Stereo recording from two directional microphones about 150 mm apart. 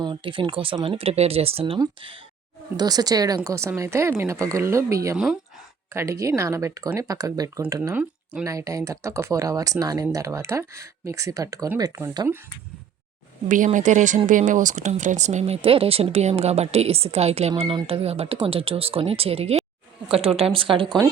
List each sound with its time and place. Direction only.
0.0 s speech: 30° right (ahead or behind)
5.1 s speech: 5° right (ahead or behind)
5.9 s speech: 20° right (ahead or behind)
13.7 s speech: 55° right (ahead or behind); by 20.8 s 35° right (ahead or behind)